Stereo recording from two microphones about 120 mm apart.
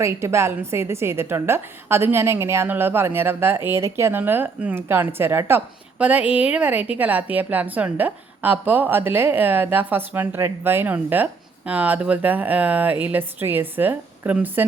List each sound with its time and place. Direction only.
0.0 s a woman's voice: 25° right (ahead or behind)